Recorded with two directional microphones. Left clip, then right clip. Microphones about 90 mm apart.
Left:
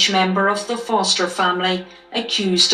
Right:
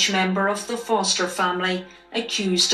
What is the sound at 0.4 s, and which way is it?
Speech, 30° left (ahead or behind).